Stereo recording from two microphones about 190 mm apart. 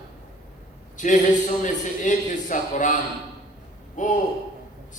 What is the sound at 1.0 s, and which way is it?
A man's voice, 40° left (ahead or behind).